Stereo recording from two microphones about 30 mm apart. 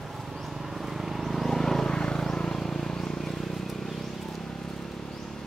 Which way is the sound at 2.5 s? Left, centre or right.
Centre.